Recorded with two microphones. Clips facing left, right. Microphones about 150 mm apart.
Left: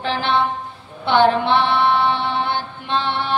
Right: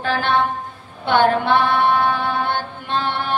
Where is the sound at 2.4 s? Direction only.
50° right (ahead or behind).